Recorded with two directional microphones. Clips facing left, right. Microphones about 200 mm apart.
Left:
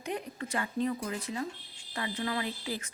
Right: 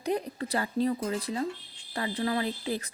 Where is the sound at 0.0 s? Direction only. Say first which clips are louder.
Right 6 dB; 35° right (ahead or behind).